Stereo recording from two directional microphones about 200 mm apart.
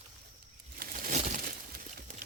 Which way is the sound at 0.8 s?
40° right (ahead or behind).